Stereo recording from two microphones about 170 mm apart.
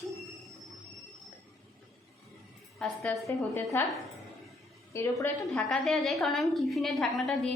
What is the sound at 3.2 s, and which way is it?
Speech, 15° left (ahead or behind).